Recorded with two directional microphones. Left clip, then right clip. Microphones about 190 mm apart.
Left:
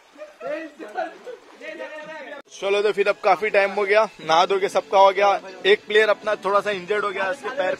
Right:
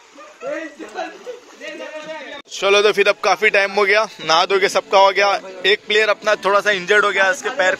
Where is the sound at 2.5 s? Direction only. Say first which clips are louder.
Right 7 dB; centre (ahead or behind).